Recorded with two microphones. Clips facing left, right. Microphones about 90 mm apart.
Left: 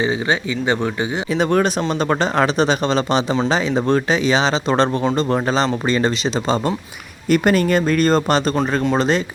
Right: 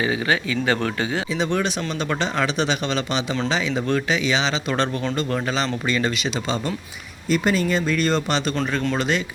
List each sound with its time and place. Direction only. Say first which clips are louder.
0.0 s speech: left 3 dB; 25° left (ahead or behind)
1.3 s speech: left 10 dB; 50° left (ahead or behind); by 6.7 s 30° left (ahead or behind)
7.3 s speech: left 5 dB; 60° left (ahead or behind); by 9.2 s 35° left (ahead or behind)